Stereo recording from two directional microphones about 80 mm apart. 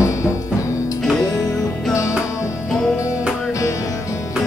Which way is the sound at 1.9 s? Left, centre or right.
Left.